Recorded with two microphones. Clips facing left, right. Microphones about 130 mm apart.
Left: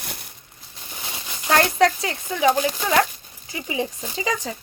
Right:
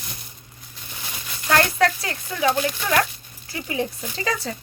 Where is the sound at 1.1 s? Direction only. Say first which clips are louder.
Left 1 dB; 20° left (ahead or behind).